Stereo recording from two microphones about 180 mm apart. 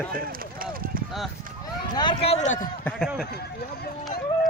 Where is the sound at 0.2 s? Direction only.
55° right (ahead or behind).